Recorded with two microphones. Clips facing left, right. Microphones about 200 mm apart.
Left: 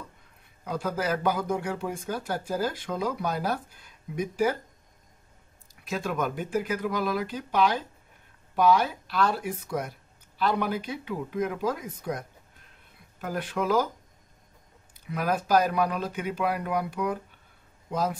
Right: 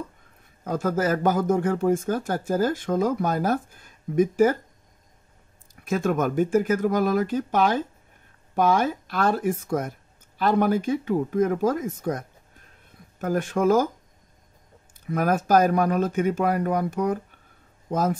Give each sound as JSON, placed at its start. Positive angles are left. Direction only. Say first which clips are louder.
{"t": 0.7, "sound": "speech", "louder": "right 5 dB", "side_deg": -45}
{"t": 5.8, "sound": "speech", "louder": "right 6 dB", "side_deg": -50}
{"t": 15.0, "sound": "speech", "louder": "right 5 dB", "side_deg": -50}